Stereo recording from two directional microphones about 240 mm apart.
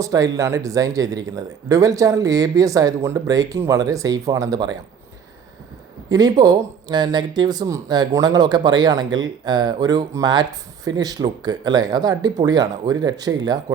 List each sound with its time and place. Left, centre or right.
0.0 s speech: centre
6.1 s speech: centre